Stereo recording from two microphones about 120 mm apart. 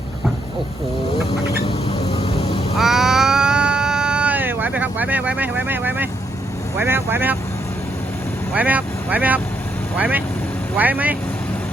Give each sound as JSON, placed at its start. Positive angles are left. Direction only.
{"t": 1.6, "sound": "a sound", "side_deg": 55}
{"t": 2.7, "sound": "cat", "side_deg": -5}
{"t": 6.7, "sound": "speech", "side_deg": -20}
{"t": 8.5, "sound": "speech", "side_deg": -15}